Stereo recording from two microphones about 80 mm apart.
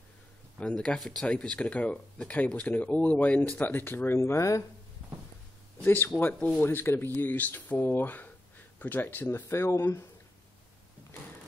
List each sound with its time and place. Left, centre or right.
0.6 s speech: centre; by 4.6 s left
6.1 s speech: left
9.5 s speech: left